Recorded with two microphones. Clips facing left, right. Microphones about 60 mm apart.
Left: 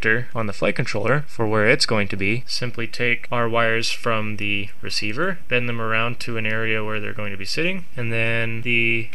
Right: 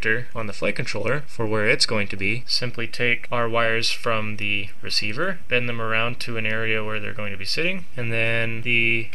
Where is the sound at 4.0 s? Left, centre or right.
Left.